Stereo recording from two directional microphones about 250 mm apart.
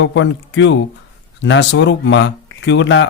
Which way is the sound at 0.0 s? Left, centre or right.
Left.